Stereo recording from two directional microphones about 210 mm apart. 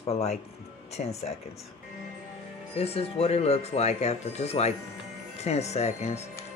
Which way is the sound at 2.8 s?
30° left (ahead or behind).